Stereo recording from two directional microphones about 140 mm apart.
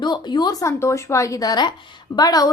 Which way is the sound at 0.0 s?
30° left (ahead or behind).